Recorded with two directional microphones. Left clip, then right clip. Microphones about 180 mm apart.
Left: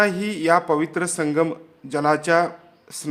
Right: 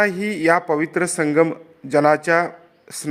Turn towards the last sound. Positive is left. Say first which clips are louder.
# right 2 dB
turn(degrees=-20)  # may be behind; listen again after turning